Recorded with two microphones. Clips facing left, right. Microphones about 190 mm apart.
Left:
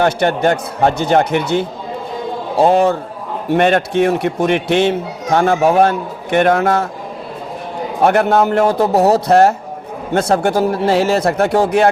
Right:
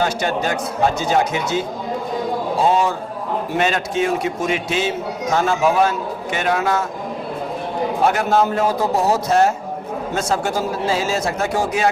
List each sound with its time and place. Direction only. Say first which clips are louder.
0.0 s a man's voice: left 6 dB; 60° left (ahead or behind)
8.0 s a man's voice: left 6 dB; 60° left (ahead or behind)